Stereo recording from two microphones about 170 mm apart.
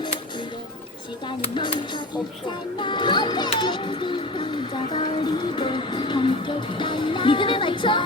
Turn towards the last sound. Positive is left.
turn(degrees=30)  # may be behind; listen again after turning